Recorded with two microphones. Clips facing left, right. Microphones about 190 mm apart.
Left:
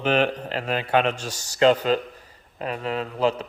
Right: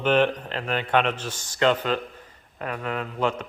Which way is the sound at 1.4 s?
35° left (ahead or behind).